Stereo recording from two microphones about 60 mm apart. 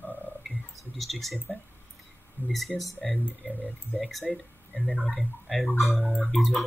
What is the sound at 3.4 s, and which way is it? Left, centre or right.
Speech, left.